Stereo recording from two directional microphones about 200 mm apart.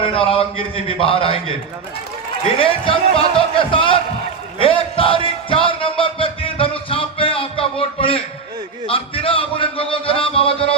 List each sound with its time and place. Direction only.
0.0 s a man's voice: 25° left (ahead or behind)
2.6 s a man's voice: 25° left (ahead or behind)
4.6 s a sound: 25° left (ahead or behind)
8.9 s a man's voice: 25° left (ahead or behind)